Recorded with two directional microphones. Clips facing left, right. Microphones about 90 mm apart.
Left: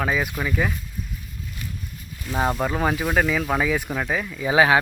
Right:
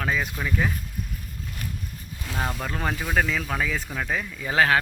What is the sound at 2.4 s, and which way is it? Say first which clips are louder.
Speech: left 7 dB; 25° left (ahead or behind).